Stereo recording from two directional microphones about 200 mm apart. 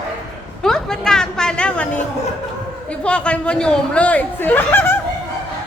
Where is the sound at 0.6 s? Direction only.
5° left (ahead or behind).